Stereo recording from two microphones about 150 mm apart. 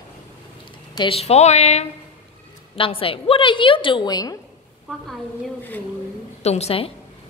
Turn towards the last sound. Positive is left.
turn(degrees=40)  # may be behind; listen again after turning